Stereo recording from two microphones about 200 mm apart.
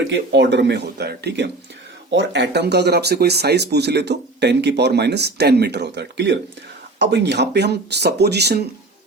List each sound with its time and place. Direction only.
0.1 s speech: 65° right (ahead or behind)